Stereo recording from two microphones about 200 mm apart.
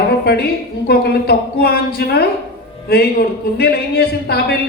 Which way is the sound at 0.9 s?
50° left (ahead or behind).